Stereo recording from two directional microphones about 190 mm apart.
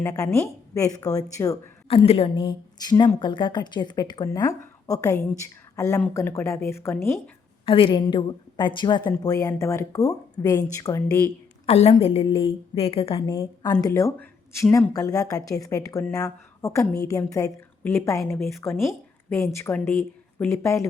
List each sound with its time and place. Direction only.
0.0 s speech: 15° left (ahead or behind)
1.9 s speech: 30° left (ahead or behind); by 7.2 s 15° left (ahead or behind)
7.6 s speech: 30° left (ahead or behind)
11.6 s a woman's voice: 35° left (ahead or behind)
13.2 s speech: 15° left (ahead or behind)